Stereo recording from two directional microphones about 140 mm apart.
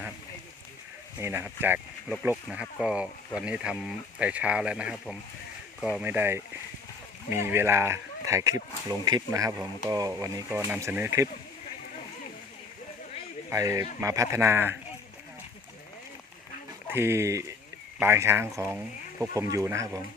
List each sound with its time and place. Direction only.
1.2 s speech: 20° right (ahead or behind)
13.5 s speech: 20° right (ahead or behind)
16.9 s speech: 15° right (ahead or behind)